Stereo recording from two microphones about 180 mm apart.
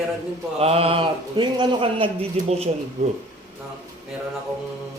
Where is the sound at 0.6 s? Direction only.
35° right (ahead or behind).